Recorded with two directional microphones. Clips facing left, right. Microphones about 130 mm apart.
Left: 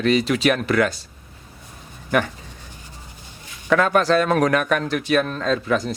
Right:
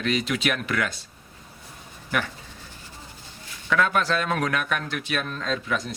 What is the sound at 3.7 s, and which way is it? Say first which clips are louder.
Speech: left 6 dB; 45° left (ahead or behind).